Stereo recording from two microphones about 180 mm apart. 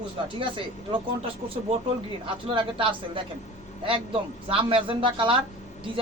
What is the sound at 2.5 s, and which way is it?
Speech, 30° right (ahead or behind).